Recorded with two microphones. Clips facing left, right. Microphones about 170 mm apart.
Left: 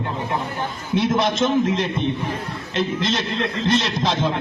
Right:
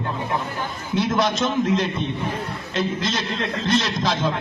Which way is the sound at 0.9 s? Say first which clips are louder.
Left 2 dB; 25° left (ahead or behind).